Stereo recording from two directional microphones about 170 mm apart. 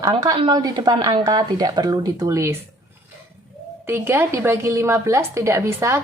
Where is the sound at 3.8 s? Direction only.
15° right (ahead or behind).